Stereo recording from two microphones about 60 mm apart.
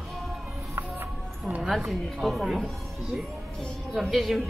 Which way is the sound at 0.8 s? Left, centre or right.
Right.